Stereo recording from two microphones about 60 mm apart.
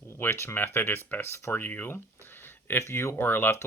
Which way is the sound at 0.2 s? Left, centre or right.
Left.